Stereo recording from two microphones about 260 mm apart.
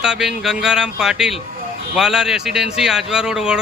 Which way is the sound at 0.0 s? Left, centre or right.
Centre.